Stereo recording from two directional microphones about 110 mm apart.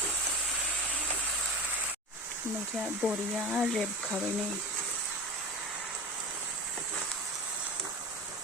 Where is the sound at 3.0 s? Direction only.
10° right (ahead or behind).